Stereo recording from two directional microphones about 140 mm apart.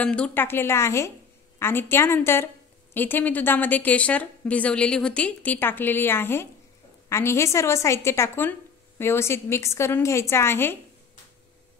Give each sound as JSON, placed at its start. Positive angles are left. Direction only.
{"t": 0.0, "sound": "a woman's voice", "side_deg": 10}